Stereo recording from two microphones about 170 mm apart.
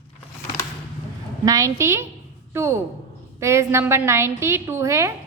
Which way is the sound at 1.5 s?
20° right (ahead or behind).